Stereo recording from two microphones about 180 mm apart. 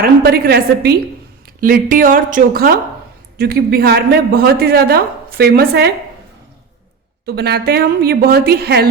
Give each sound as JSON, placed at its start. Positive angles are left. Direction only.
{"t": 0.2, "sound": "a woman's voice", "side_deg": -60}
{"t": 7.3, "sound": "a woman's voice", "side_deg": -65}